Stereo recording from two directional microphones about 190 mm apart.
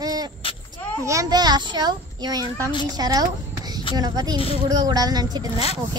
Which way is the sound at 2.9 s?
20° right (ahead or behind).